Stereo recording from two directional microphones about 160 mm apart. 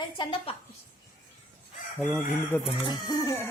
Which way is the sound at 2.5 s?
10° left (ahead or behind).